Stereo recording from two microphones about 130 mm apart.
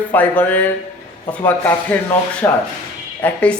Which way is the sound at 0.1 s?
15° left (ahead or behind).